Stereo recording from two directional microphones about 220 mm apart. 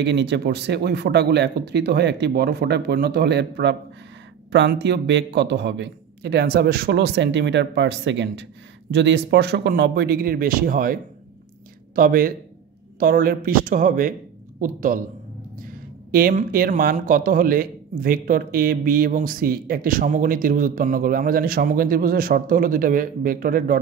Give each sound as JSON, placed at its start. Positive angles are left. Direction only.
{"t": 0.0, "sound": "a man's voice", "side_deg": -55}